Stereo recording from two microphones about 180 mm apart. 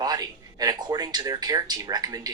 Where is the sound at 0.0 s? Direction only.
20° right (ahead or behind).